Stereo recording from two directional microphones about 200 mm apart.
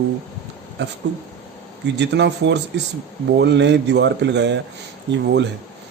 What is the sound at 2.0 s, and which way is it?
Speech, 60° right (ahead or behind).